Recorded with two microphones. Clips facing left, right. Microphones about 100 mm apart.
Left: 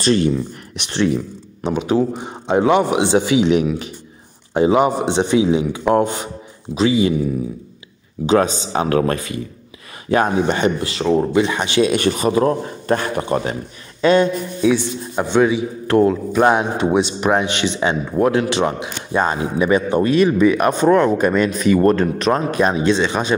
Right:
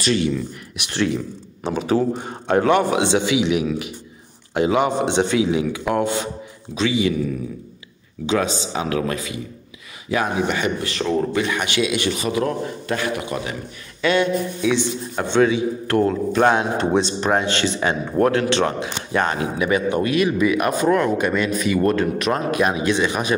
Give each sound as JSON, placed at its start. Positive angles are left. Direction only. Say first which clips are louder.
{"t": 0.0, "sound": "a man's voice", "louder": "left 4 dB", "side_deg": 40}
{"t": 0.8, "sound": "a man's voice", "louder": "left 3 dB", "side_deg": 30}
{"t": 1.6, "sound": "a man's voice", "louder": "left 2 dB", "side_deg": 0}
{"t": 8.3, "sound": "a man's voice", "louder": "left 5 dB", "side_deg": 40}
{"t": 11.8, "sound": "a man's voice", "louder": "left 7 dB", "side_deg": 40}
{"t": 15.4, "sound": "speech", "louder": "left 1 dB", "side_deg": 20}
{"t": 17.3, "sound": "a man's voice", "louder": "left 1 dB", "side_deg": 20}